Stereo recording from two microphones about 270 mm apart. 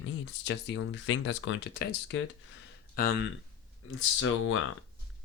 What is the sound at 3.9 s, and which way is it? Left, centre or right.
Speech, left.